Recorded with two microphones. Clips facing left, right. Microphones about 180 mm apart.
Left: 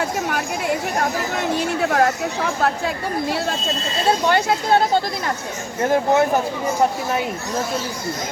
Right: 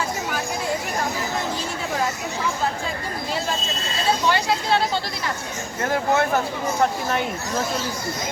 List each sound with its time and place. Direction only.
0.0 s chatter: 65° left (ahead or behind)
1.4 s a sound: 65° left (ahead or behind)
4.3 s speech: 50° left (ahead or behind)
5.9 s speech: 15° left (ahead or behind)